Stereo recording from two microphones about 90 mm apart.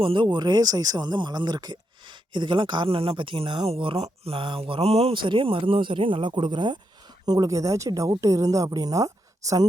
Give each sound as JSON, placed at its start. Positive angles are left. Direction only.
{"t": 0.0, "sound": "speech", "side_deg": -65}
{"t": 7.3, "sound": "a woman's voice", "side_deg": -45}